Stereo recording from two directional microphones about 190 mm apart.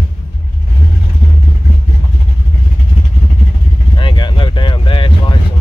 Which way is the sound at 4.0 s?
25° left (ahead or behind).